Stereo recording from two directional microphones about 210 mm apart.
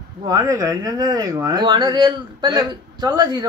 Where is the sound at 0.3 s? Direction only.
15° right (ahead or behind).